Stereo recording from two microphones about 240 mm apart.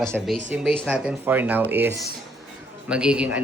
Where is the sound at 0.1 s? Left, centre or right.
Centre.